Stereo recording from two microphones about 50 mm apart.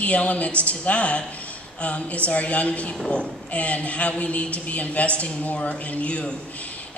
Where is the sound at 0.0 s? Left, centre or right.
Left.